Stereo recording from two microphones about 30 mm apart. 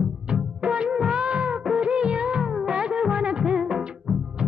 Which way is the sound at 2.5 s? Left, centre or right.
Right.